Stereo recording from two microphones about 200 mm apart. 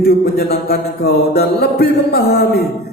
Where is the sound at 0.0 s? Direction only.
50° left (ahead or behind).